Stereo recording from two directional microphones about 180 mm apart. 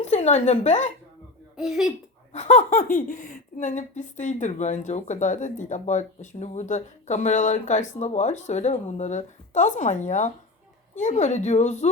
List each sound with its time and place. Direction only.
0.0 s a woman's voice: 40° left (ahead or behind)
1.5 s speech: centre (ahead or behind)
2.3 s speech: 40° left (ahead or behind)